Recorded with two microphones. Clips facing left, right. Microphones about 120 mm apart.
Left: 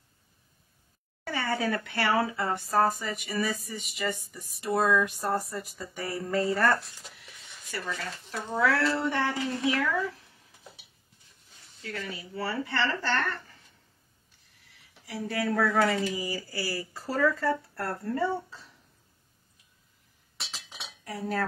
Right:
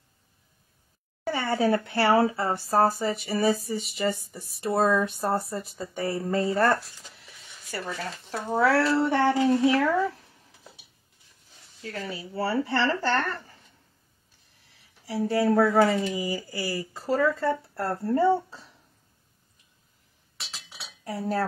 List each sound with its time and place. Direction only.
1.2 s speech: 30° right (ahead or behind)
8.5 s a child's voice: 35° right (ahead or behind)
11.8 s a child's voice: 35° right (ahead or behind)
14.7 s speech: 30° right (ahead or behind)
20.3 s chink: centre (ahead or behind)
21.0 s speech: 30° right (ahead or behind)